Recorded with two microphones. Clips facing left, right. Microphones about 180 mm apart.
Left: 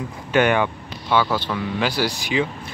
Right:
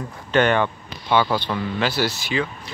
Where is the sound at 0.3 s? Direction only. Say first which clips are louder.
Even; 10° left (ahead or behind).